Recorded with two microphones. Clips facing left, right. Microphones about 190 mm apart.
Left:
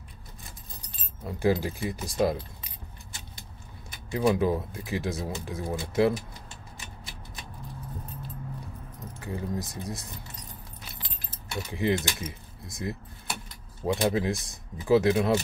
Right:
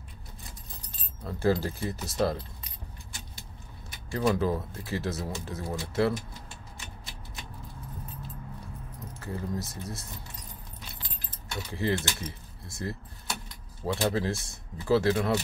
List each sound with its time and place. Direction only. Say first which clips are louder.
1.2 s speech: left 1 dB; 15° left (ahead or behind)
4.1 s speech: left 2 dB; 15° left (ahead or behind)
9.2 s speech: left 1 dB; 15° left (ahead or behind)
11.7 s speech: left 2 dB; 15° left (ahead or behind)
13.9 s speech: left 2 dB; 15° left (ahead or behind)